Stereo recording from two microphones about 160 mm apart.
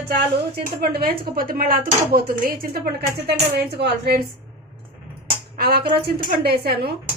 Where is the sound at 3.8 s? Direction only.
85° right.